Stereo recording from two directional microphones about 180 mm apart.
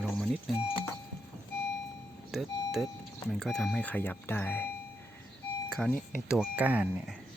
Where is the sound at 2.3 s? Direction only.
Centre (ahead or behind).